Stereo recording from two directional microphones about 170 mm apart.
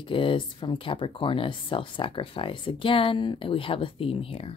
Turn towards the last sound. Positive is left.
turn(degrees=35)  # may be behind; listen again after turning